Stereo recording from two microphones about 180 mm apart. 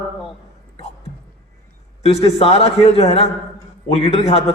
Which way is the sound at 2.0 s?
35° left (ahead or behind).